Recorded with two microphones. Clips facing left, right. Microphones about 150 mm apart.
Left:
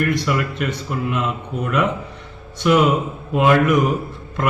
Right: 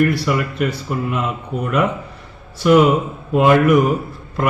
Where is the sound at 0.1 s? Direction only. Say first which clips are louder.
Right 1 dB; centre (ahead or behind).